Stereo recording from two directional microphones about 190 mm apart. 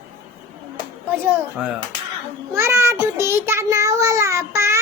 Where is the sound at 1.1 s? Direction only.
5° right (ahead or behind).